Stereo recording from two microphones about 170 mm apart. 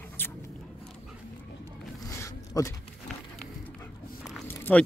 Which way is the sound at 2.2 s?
15° left (ahead or behind).